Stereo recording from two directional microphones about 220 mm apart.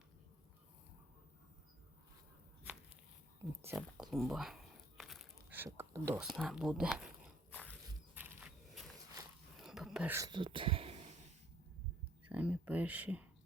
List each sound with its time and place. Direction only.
3.8 s crumpling: centre (ahead or behind)
7.5 s walk: 5° left (ahead or behind)
8.1 s a sound: 10° right (ahead or behind); by 11.1 s 25° right (ahead or behind)
12.3 s speech: 5° right (ahead or behind)